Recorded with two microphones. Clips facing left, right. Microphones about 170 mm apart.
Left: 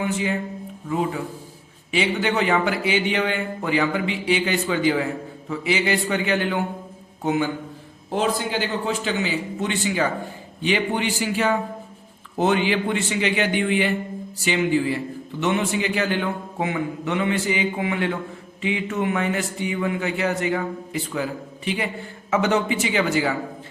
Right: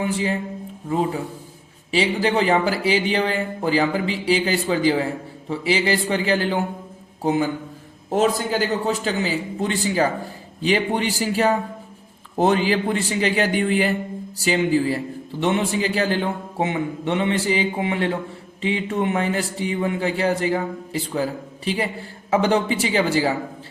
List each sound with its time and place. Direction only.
0.0 s a man's voice: 35° right (ahead or behind)
8.1 s a man's voice: 40° right (ahead or behind)